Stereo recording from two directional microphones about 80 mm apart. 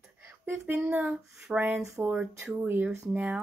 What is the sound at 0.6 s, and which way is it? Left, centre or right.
Speech, centre.